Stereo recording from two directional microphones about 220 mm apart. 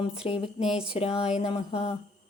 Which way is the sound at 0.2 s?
25° left (ahead or behind).